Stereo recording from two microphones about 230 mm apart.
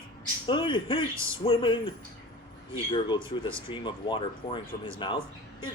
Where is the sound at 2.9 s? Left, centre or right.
Left.